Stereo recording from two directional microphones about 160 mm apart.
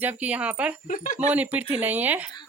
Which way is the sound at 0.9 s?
55° left (ahead or behind).